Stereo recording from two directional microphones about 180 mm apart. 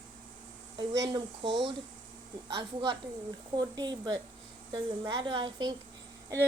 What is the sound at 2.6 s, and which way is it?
Speech, 25° right (ahead or behind).